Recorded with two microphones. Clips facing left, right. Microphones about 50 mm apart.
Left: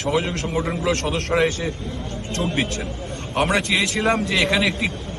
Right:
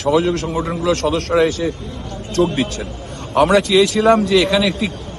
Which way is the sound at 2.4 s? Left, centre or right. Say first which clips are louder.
Right 10 dB; centre.